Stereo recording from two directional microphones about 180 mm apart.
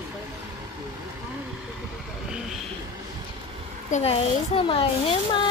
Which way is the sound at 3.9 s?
35° left (ahead or behind).